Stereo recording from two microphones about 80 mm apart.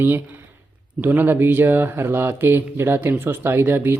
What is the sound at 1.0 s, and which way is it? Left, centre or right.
Speech, right.